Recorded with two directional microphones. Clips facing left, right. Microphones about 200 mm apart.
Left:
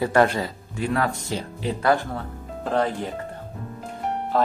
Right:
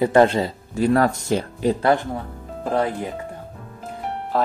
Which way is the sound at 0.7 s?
40° right (ahead or behind).